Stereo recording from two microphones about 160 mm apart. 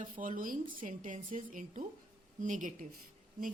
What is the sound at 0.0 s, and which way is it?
A woman's voice, 55° right (ahead or behind).